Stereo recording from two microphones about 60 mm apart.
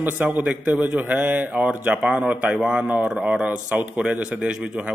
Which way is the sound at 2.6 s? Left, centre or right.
Centre.